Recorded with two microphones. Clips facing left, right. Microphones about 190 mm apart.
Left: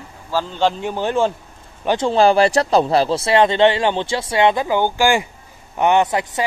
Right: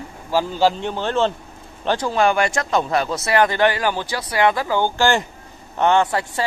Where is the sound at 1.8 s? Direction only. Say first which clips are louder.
Left 4 dB; 25° left (ahead or behind).